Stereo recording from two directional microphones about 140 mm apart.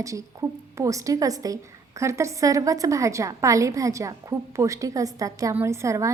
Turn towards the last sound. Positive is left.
turn(degrees=-20)  # may be behind; listen again after turning